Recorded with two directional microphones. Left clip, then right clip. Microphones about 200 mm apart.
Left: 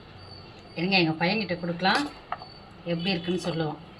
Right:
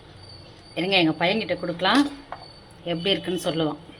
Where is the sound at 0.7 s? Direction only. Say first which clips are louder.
Right 3 dB; 60° right (ahead or behind).